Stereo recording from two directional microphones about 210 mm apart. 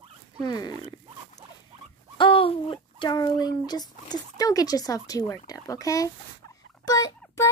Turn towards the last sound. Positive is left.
turn(degrees=15)  # may be behind; listen again after turning